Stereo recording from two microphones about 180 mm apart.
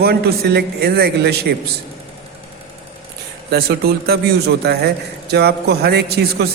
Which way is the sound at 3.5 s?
60° right (ahead or behind).